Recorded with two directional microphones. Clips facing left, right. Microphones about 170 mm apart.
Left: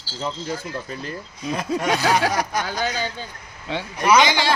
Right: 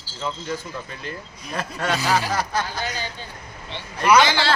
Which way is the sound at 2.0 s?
90° left.